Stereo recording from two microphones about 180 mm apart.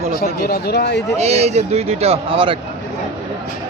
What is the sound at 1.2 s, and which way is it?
A man's voice, 35° right (ahead or behind).